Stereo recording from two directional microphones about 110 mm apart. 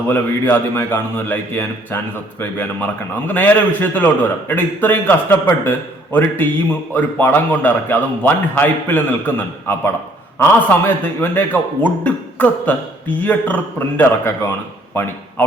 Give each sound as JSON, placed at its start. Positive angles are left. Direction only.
{"t": 0.1, "sound": "a man's voice", "side_deg": 20}
{"t": 3.3, "sound": "a man's voice", "side_deg": 15}